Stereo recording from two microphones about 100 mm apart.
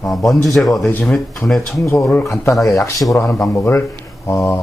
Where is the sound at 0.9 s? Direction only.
20° left (ahead or behind).